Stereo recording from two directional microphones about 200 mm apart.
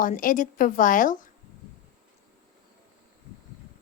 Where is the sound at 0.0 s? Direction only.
40° left (ahead or behind).